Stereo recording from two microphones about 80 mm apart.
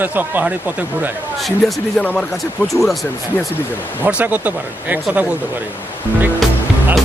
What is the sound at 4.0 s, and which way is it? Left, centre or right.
Speech, centre.